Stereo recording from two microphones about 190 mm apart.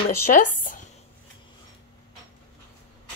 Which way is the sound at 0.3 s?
45° left (ahead or behind).